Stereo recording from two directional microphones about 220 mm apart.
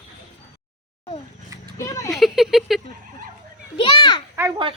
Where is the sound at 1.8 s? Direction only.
15° left (ahead or behind).